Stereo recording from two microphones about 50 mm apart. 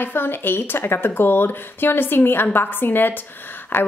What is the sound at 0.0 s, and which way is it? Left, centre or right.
Speech, left.